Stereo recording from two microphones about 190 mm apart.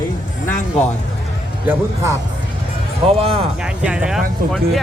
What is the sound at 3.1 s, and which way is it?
Speech, 30° right (ahead or behind).